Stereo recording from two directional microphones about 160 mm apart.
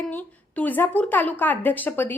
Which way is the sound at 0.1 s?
10° left (ahead or behind).